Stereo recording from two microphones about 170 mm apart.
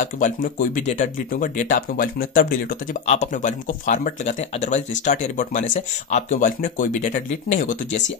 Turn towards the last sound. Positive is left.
turn(degrees=50)  # may be behind; listen again after turning